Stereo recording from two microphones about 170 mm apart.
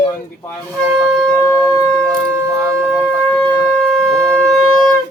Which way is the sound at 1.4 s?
15° left (ahead or behind).